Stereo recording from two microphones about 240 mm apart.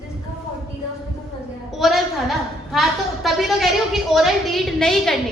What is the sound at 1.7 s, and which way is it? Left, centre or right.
A woman's voice, centre.